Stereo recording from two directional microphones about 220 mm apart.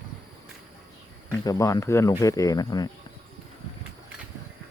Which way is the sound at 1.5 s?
15° left (ahead or behind).